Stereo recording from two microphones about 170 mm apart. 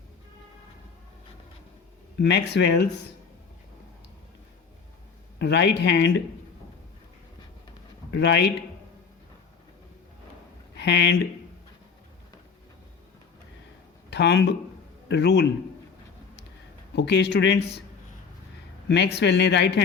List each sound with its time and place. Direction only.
2.1 s speech: 90° left
5.4 s speech: 85° left
8.1 s speech: 85° left
10.8 s speech: 90° left
14.1 s speech: 85° left
16.9 s speech: 90° left
18.9 s speech: 85° left